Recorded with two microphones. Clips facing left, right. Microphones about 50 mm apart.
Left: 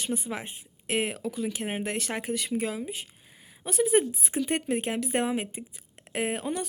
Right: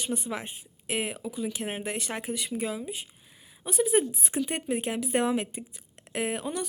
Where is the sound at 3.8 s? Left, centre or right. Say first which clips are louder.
Left 2 dB; left.